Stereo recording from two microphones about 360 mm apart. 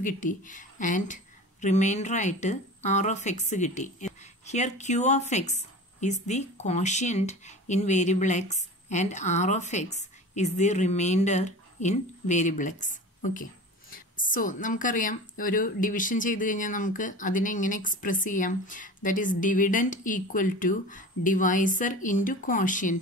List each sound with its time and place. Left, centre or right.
0.0 s speech: left